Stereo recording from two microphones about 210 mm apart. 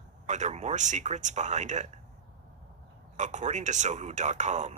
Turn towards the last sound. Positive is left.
turn(degrees=-35)  # may be behind; listen again after turning